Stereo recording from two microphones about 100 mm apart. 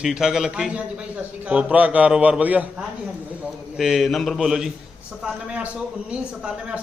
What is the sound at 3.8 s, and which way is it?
A man's voice, centre (ahead or behind).